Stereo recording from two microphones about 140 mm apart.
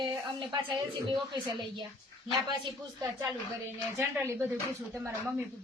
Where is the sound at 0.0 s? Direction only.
35° right (ahead or behind).